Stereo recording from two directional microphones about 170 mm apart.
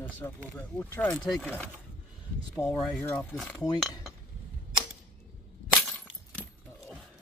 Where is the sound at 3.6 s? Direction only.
20° left (ahead or behind).